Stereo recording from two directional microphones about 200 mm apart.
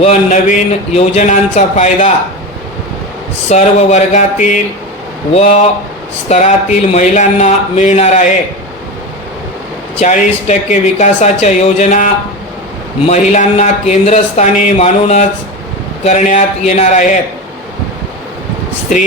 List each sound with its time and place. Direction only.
0.0 s speech: 35° left (ahead or behind)
3.5 s speech: 35° left (ahead or behind)
10.0 s speech: 35° left (ahead or behind)